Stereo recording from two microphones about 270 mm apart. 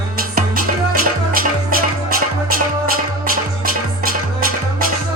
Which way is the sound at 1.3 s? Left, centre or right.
Right.